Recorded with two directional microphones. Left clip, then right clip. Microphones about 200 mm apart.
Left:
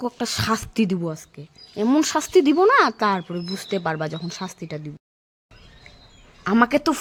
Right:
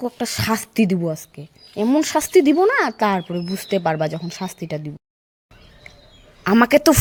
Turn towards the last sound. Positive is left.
turn(degrees=-15)  # may be behind; listen again after turning